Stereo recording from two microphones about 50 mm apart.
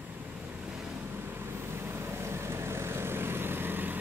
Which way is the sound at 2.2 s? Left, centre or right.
Right.